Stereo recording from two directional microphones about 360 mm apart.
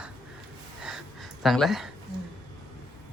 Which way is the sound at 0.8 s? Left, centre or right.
Centre.